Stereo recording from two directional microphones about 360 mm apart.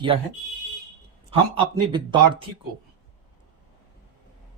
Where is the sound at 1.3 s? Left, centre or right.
Centre.